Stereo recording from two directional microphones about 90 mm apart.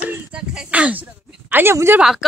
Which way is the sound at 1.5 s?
30° right (ahead or behind).